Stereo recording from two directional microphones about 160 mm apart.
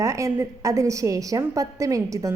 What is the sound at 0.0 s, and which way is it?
A woman's voice, 20° right (ahead or behind).